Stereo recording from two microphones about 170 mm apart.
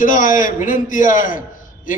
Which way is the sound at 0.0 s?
50° left (ahead or behind).